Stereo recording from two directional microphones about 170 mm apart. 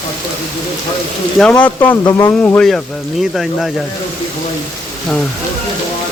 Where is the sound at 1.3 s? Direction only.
5° left (ahead or behind).